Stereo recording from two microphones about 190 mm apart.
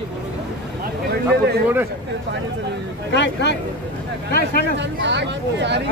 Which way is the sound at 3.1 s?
65° left (ahead or behind).